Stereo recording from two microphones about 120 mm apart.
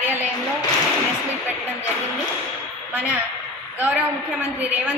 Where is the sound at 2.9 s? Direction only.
10° right (ahead or behind).